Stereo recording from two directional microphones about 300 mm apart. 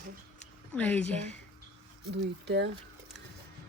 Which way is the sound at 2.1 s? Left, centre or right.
Right.